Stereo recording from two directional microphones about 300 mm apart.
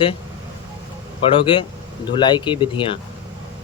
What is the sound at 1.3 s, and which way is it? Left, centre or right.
Speech, centre.